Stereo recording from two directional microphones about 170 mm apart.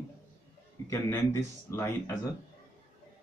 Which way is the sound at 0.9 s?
15° left (ahead or behind).